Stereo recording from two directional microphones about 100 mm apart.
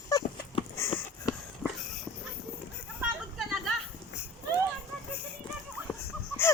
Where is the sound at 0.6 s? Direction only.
65° left (ahead or behind).